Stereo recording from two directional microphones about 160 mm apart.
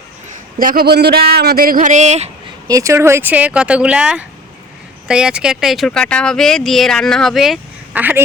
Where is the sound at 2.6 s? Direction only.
20° right (ahead or behind).